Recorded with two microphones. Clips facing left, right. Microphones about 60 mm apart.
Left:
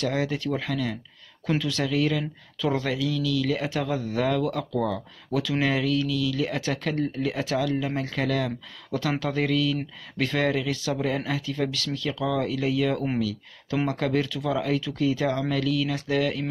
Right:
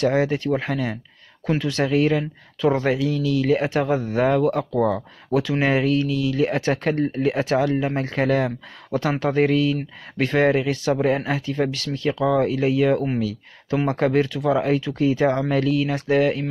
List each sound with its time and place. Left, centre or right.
0.1 s speech: right